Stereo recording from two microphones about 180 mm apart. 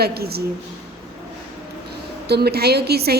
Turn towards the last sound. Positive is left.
turn(degrees=-60)  # may be behind; listen again after turning